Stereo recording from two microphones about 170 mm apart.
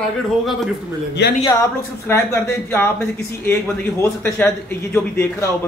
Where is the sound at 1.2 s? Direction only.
90° left.